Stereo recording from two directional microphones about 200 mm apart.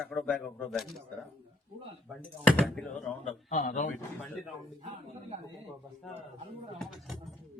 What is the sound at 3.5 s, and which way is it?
Speech, 40° left (ahead or behind).